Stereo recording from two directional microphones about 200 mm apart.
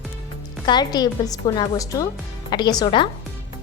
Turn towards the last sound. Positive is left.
turn(degrees=20)  # may be behind; listen again after turning